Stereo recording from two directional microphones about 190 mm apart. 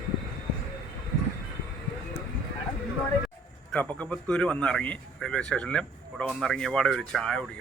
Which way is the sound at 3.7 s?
5° left (ahead or behind).